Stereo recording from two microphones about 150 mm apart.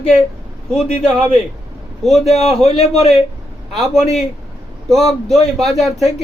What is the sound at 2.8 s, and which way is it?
Speech, 45° left (ahead or behind).